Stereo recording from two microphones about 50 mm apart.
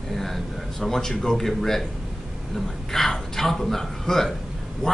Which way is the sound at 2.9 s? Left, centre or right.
Centre.